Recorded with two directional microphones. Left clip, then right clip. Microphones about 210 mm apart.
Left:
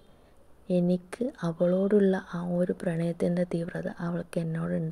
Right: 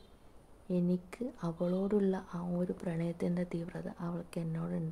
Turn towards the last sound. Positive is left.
turn(degrees=15)  # may be behind; listen again after turning